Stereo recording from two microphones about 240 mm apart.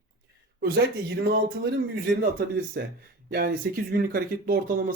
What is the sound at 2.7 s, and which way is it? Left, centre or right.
Speech, right.